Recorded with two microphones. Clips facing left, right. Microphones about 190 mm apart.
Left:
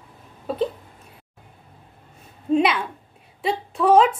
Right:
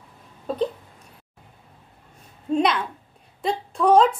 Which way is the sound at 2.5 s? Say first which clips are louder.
Left 2 dB; 5° left (ahead or behind).